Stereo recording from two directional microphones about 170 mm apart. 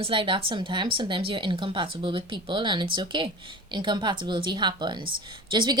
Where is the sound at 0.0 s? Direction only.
30° right (ahead or behind).